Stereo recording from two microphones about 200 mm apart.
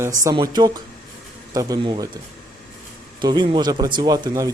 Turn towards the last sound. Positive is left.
turn(degrees=-15)  # may be behind; listen again after turning